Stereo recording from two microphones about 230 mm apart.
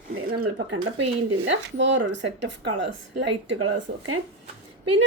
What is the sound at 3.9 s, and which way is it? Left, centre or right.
Speech, right.